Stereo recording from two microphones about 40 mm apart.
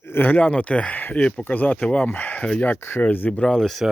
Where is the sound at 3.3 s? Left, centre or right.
Left.